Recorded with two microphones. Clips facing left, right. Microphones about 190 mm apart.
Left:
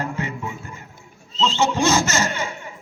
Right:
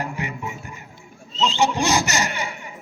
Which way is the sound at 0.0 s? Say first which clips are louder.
Left 2 dB; 15° right (ahead or behind).